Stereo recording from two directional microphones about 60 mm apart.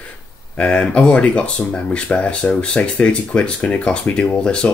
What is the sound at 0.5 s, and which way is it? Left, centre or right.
Speech, left.